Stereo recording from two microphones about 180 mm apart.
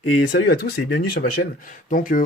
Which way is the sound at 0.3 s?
65° left (ahead or behind).